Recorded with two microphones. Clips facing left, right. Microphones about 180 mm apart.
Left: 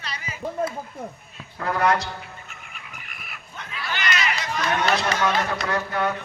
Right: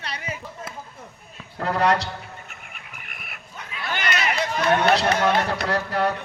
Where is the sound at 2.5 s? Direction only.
55° right (ahead or behind).